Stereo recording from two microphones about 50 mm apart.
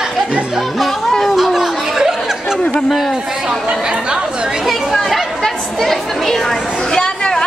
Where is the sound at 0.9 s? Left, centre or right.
Centre.